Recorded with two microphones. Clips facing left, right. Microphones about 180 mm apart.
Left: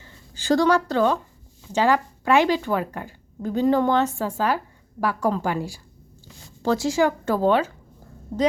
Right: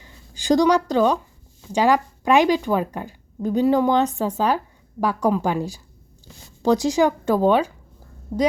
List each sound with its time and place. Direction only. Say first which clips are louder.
0.0 s speech: even; 15° right (ahead or behind)